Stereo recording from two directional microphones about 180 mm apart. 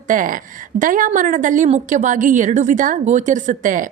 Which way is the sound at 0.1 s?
50° right (ahead or behind).